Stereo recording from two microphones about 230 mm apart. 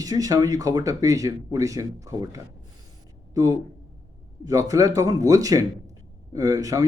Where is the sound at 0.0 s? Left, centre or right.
Centre.